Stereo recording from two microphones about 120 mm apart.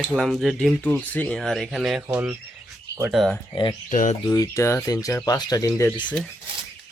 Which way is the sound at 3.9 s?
90° left.